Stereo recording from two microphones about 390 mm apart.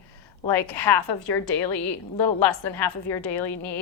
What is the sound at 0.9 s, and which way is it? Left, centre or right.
Speech, left.